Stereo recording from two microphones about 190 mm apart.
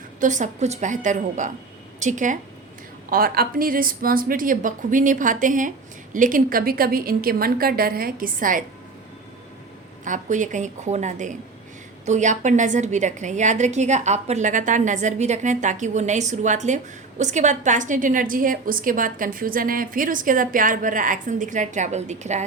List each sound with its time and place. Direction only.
0.2 s a woman's voice: 40° right (ahead or behind)
10.0 s a woman's voice: 40° right (ahead or behind)